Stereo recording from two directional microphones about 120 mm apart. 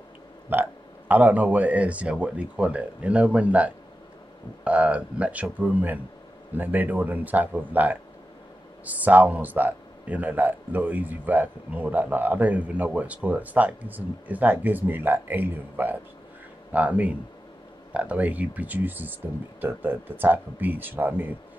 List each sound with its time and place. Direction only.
0.5 s speech: 15° right (ahead or behind)